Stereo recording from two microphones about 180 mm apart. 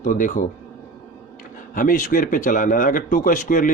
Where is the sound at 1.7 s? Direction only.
45° left (ahead or behind).